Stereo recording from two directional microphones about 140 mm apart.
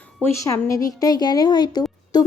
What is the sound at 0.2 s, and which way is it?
Speech, 20° left (ahead or behind).